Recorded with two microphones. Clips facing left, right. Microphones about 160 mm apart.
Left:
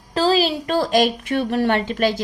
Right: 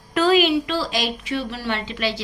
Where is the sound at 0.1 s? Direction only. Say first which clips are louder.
Right 1 dB; 30° left (ahead or behind).